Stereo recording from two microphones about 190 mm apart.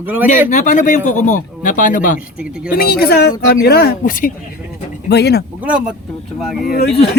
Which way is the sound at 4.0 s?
45° left (ahead or behind).